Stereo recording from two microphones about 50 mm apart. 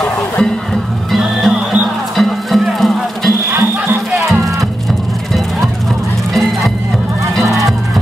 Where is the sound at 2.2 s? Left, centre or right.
Centre.